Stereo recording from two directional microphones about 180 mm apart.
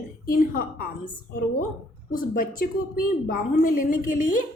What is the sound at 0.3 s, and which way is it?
Speech, 50° left (ahead or behind).